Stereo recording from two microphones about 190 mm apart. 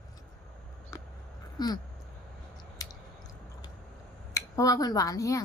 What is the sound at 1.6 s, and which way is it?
Speech, 20° left (ahead or behind).